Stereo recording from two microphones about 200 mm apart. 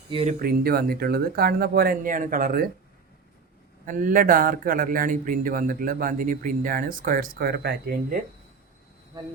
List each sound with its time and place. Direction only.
0.1 s speech: 30° right (ahead or behind)
0.4 s a man's voice: 50° right (ahead or behind)
3.8 s a man's voice: 40° right (ahead or behind)